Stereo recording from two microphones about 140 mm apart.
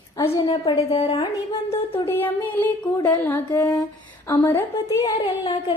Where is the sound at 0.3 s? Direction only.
30° left (ahead or behind).